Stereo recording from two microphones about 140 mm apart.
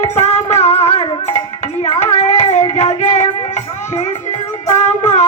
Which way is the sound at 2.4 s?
55° left (ahead or behind).